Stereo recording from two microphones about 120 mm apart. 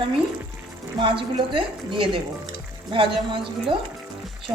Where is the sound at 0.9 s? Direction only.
45° right (ahead or behind).